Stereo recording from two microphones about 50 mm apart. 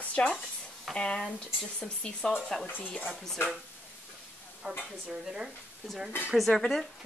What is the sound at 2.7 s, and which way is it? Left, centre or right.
Stir, left.